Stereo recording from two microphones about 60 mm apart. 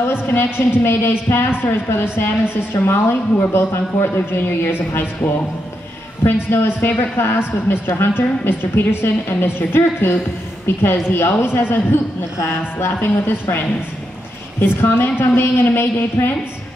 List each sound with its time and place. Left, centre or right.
0.1 s a woman's voice: left
6.5 s a woman's voice: left
14.6 s a woman's voice: left